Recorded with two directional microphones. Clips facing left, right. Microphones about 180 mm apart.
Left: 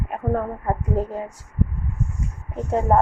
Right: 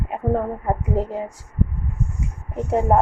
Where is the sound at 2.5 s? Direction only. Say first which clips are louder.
Right 1 dB; 20° right (ahead or behind).